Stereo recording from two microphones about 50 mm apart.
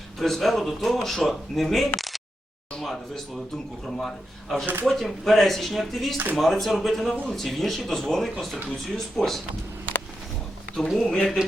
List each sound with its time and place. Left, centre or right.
0.2 s speech: centre
2.0 s a sound: centre
2.8 s speech: centre
4.6 s speech: right
4.9 s speech: centre
10.8 s speech: centre